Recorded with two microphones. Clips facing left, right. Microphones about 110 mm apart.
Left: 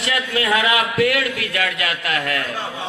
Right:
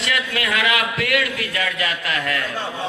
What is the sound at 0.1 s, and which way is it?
A man's voice, 35° left (ahead or behind).